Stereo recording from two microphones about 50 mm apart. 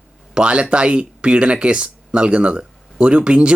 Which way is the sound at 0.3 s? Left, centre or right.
Centre.